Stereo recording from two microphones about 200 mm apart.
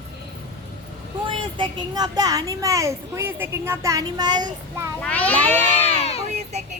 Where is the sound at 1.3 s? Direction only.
25° right (ahead or behind).